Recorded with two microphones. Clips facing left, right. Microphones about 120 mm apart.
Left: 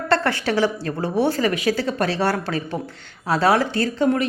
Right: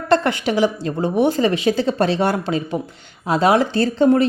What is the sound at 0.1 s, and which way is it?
Speech, 15° right (ahead or behind).